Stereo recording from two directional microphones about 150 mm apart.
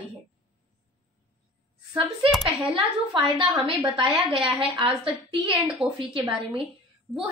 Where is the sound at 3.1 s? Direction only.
35° right (ahead or behind).